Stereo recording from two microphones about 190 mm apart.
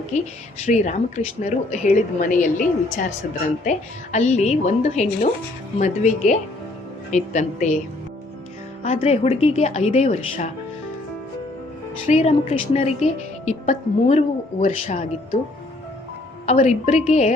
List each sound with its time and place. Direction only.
0.6 s a woman's voice: 35° left (ahead or behind)
8.8 s a woman's voice: 30° left (ahead or behind)
12.0 s a woman's voice: 35° left (ahead or behind)
16.5 s a woman's voice: 35° left (ahead or behind)